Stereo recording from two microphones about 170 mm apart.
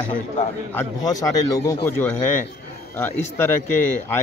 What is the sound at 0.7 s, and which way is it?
A man's voice, 20° left (ahead or behind).